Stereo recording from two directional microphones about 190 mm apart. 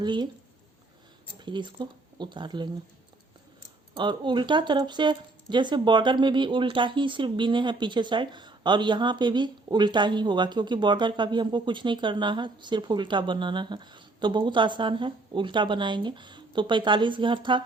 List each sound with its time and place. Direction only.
0.0 s speech: 25° right (ahead or behind)
1.4 s speech: 25° right (ahead or behind)
3.9 s speech: 25° right (ahead or behind)